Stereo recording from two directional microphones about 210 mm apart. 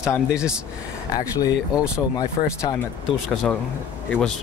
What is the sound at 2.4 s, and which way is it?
Speech, 25° left (ahead or behind).